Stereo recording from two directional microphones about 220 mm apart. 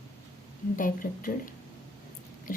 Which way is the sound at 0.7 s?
40° left (ahead or behind).